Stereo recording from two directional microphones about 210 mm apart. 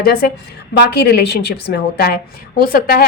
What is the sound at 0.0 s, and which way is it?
A woman's voice, 45° left (ahead or behind).